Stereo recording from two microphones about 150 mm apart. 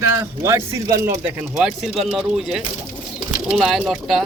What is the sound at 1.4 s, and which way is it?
Speech, 5° right (ahead or behind).